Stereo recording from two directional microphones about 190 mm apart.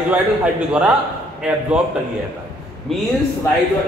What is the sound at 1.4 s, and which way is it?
Speech, 5° right (ahead or behind).